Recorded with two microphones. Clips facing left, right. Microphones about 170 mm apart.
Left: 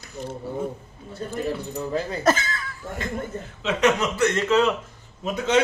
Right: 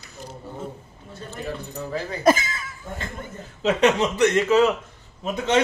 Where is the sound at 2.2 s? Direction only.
10° right (ahead or behind).